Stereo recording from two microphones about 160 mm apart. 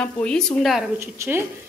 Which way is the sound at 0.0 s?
5° left (ahead or behind).